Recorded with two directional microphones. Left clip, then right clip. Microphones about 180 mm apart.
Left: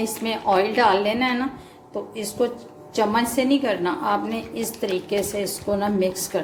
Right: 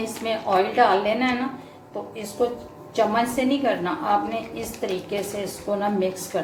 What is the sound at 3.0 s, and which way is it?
A woman's voice, 50° left (ahead or behind).